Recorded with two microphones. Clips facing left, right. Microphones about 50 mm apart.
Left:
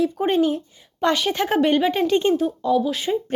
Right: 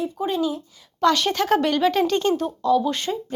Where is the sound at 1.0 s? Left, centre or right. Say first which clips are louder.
Right 1 dB; centre.